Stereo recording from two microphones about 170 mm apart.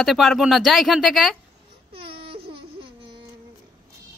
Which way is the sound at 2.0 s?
30° right (ahead or behind).